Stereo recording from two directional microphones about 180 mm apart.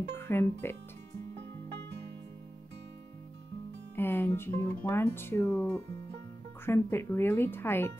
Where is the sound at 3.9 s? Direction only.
10° left (ahead or behind).